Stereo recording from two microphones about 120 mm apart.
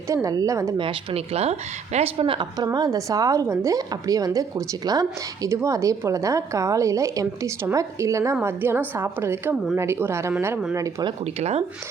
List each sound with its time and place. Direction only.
0.1 s speech: 30° right (ahead or behind)
0.8 s speech: 50° right (ahead or behind)
2.7 s speech: 30° right (ahead or behind)
11.3 s speech: 60° right (ahead or behind)